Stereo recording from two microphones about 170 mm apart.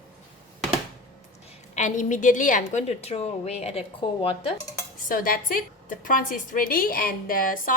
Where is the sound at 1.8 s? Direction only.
45° left (ahead or behind).